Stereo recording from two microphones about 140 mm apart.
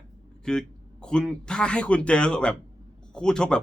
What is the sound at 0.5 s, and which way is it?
Speech, 5° left (ahead or behind).